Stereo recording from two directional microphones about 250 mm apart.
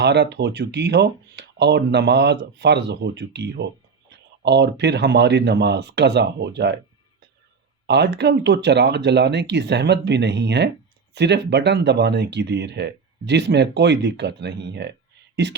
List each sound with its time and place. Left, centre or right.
0.0 s speech: right
7.9 s speech: right